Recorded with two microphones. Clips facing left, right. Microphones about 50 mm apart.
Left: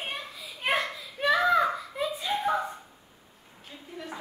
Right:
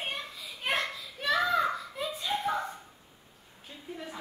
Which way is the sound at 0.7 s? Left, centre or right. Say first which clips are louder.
Left 3 dB; centre.